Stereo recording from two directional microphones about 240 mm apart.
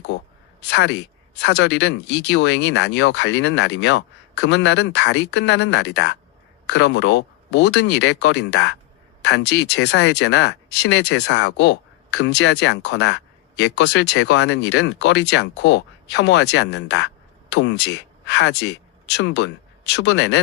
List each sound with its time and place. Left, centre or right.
0.7 s speech: left